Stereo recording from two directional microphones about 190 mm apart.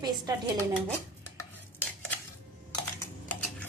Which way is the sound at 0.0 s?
20° right (ahead or behind).